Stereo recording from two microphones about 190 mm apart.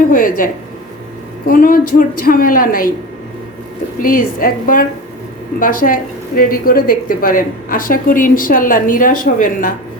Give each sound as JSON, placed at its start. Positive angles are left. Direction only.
{"t": 0.1, "sound": "a woman's voice", "side_deg": 45}
{"t": 4.0, "sound": "a woman's voice", "side_deg": 45}